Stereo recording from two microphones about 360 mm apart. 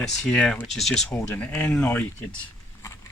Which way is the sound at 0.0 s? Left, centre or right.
Centre.